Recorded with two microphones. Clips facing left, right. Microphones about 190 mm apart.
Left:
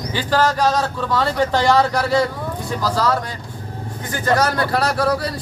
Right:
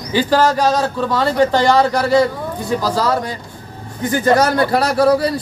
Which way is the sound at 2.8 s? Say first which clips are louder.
Even; 10° right (ahead or behind).